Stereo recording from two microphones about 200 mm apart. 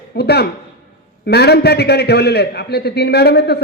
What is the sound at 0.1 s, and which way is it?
A man's voice, 55° left (ahead or behind).